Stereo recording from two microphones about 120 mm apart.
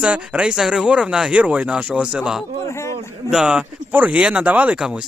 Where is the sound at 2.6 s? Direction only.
25° left (ahead or behind).